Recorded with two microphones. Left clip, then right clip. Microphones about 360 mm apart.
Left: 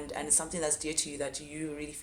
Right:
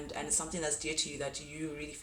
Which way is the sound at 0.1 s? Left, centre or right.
Centre.